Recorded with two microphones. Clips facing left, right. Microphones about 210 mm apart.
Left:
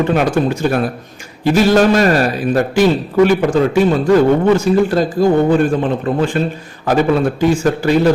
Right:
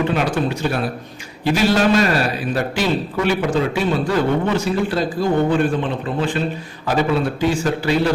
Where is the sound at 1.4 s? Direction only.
45° left (ahead or behind).